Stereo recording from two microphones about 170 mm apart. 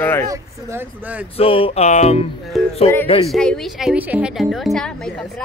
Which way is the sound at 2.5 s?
Centre (ahead or behind).